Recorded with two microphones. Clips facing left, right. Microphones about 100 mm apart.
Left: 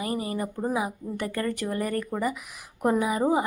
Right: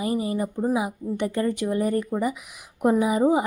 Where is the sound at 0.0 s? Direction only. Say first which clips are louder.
Right 4 dB; 20° right (ahead or behind).